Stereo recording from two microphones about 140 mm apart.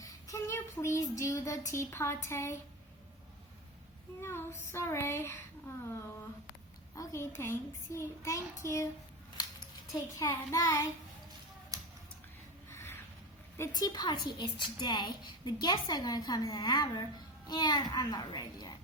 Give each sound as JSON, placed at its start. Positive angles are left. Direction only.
{"t": 0.0, "sound": "child singing", "side_deg": 20}
{"t": 4.2, "sound": "child singing", "side_deg": 15}
{"t": 4.7, "sound": "a woman's voice", "side_deg": 20}
{"t": 9.9, "sound": "a woman's voice", "side_deg": 25}
{"t": 11.7, "sound": "a sound", "side_deg": -25}
{"t": 12.7, "sound": "a sound", "side_deg": 20}
{"t": 13.6, "sound": "a woman's voice", "side_deg": 25}